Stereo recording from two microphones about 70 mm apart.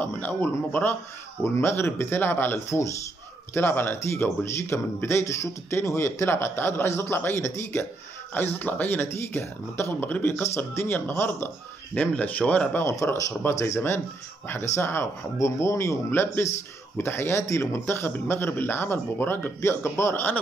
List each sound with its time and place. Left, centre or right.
0.0 s speech: left
1.4 s speech: left
8.4 s speech: left
9.9 s speech: left
10.3 s speech: left
12.8 s speech: left
15.3 s speech: left
16.1 s speech: left